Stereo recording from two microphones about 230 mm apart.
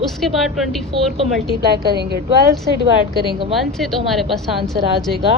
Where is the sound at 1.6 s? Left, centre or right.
Right.